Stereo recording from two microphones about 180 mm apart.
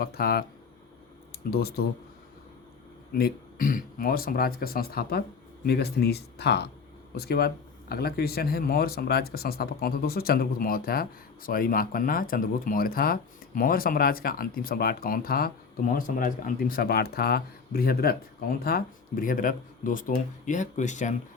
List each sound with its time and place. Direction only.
0.0 s speech: 60° left (ahead or behind)
3.1 s speech: 55° left (ahead or behind)